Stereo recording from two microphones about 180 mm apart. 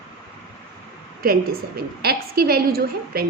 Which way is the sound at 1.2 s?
60° right (ahead or behind).